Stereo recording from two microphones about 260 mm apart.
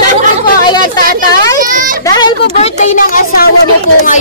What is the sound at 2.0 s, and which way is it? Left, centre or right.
A woman's voice, centre.